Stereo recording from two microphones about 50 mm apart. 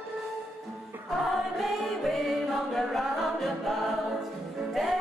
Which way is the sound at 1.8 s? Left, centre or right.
Centre.